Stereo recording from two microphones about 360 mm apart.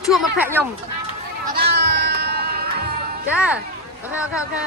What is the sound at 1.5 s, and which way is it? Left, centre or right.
Music, right.